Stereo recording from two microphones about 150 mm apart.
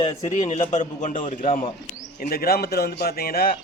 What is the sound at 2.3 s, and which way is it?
A man's voice, 90° left.